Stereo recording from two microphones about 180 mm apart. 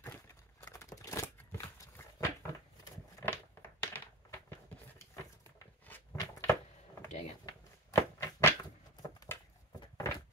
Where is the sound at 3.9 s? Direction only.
10° left (ahead or behind).